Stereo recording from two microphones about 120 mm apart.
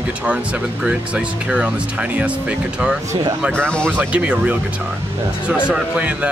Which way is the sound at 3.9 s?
10° right (ahead or behind).